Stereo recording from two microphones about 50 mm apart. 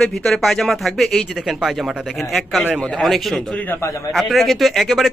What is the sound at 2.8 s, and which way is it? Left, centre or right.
Speech, left.